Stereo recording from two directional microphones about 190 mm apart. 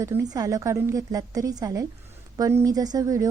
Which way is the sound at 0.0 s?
15° right (ahead or behind).